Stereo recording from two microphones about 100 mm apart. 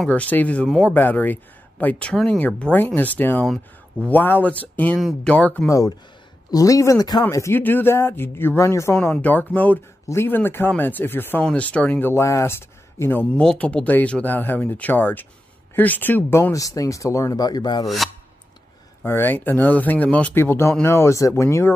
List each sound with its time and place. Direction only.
0.1 s speech: 15° left (ahead or behind)
0.9 s speech: 20° left (ahead or behind)
5.7 s speech: 35° left (ahead or behind)
7.5 s speech: 20° left (ahead or behind)
9.1 s speech: 15° left (ahead or behind)
12.1 s speech: 30° left (ahead or behind)
13.4 s speech: 10° left (ahead or behind); by 17.8 s 45° left (ahead or behind)
17.8 s speech: centre (ahead or behind)
19.0 s speech: 20° left (ahead or behind)